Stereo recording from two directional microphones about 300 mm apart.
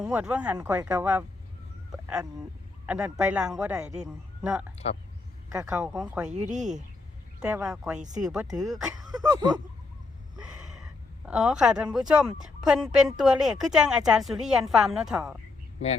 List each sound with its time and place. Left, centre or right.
0.0 s a woman's voice: centre
2.8 s a woman's voice: centre
6.3 s speech: right
7.3 s a woman's voice: centre
7.9 s speech: right
8.2 s a woman's voice: centre
9.2 s speech: centre
11.3 s a woman's voice: centre